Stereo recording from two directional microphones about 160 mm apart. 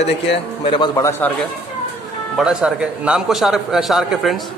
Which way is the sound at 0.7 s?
30° left (ahead or behind).